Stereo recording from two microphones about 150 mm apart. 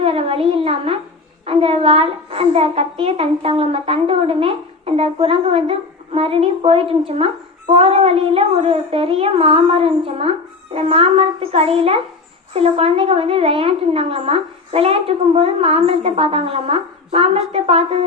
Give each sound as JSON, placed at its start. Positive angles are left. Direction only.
{"t": 0.0, "sound": "speech", "side_deg": -40}